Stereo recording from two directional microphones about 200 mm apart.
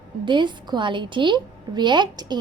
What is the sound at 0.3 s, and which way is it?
A woman's voice, 25° right (ahead or behind).